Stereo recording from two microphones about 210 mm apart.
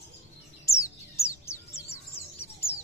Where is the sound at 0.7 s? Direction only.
15° left (ahead or behind).